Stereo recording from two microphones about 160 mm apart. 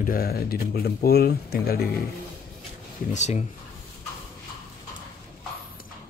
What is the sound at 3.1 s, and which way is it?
Speech, 45° left (ahead or behind).